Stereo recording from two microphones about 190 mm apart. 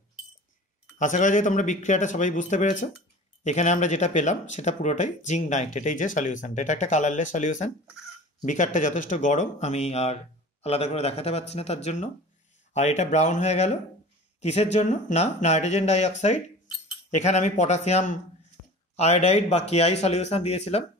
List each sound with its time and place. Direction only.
0.9 s speech: 40° left (ahead or behind)